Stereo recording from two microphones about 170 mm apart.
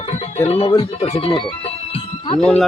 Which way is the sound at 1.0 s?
35° left (ahead or behind).